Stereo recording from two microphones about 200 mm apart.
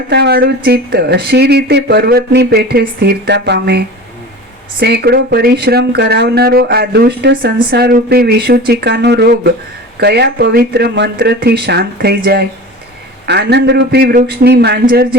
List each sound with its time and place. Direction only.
0.1 s speech: 55° right (ahead or behind)